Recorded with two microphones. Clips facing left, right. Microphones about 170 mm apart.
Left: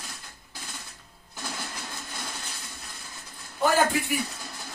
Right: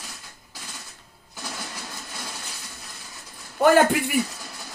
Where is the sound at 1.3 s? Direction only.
5° right (ahead or behind).